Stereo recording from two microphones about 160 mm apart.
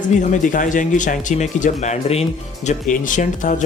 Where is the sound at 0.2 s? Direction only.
50° left (ahead or behind).